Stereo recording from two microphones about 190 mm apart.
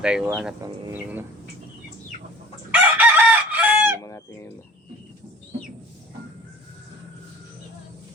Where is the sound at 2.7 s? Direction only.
10° right (ahead or behind).